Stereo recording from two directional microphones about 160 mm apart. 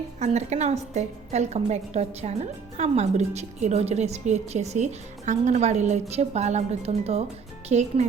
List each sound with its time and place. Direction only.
0.2 s a woman's voice: 45° right (ahead or behind)